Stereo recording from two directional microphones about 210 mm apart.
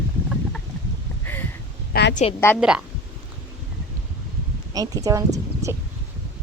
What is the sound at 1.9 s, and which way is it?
Speech, 45° left (ahead or behind).